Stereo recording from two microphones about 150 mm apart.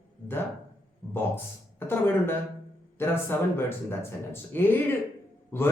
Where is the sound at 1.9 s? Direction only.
15° left (ahead or behind).